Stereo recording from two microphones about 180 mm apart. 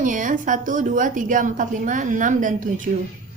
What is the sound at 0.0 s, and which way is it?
A woman's voice, 45° right (ahead or behind).